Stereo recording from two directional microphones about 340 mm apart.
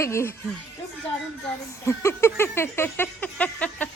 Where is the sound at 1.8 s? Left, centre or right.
Centre.